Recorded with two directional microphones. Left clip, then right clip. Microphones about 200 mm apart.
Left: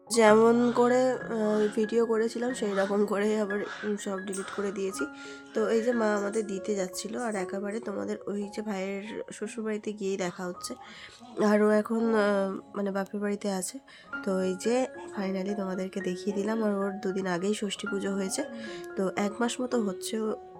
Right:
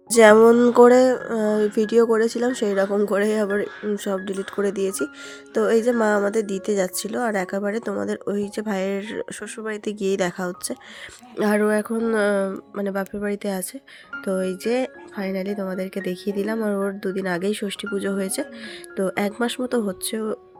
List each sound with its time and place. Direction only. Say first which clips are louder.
0.1 s speech: right 8 dB; 30° right (ahead or behind)
11.3 s speech: right 4 dB; 15° right (ahead or behind)